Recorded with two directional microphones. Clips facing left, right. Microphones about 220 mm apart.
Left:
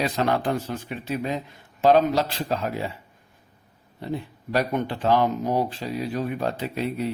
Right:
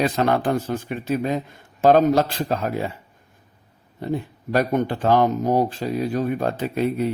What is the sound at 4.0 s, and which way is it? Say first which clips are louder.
Speech: right 4 dB; 50° right (ahead or behind).